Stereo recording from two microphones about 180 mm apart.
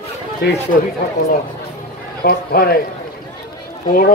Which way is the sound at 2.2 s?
60° left (ahead or behind).